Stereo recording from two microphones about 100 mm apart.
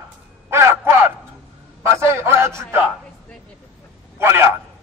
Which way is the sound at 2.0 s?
25° right (ahead or behind).